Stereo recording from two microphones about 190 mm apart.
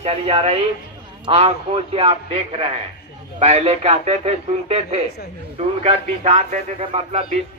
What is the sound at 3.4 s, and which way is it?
Speech, 35° right (ahead or behind).